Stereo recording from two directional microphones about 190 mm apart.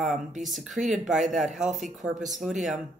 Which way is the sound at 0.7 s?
40° right (ahead or behind).